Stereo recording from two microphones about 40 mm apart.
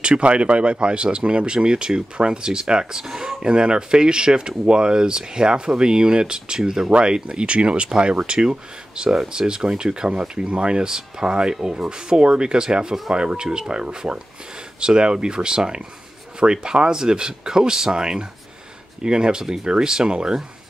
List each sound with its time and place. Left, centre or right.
0.0 s speech: right